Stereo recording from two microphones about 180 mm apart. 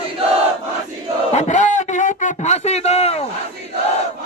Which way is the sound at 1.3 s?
40° left (ahead or behind).